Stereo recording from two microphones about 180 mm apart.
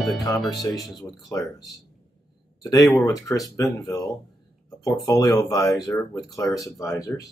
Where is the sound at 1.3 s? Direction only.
20° left (ahead or behind).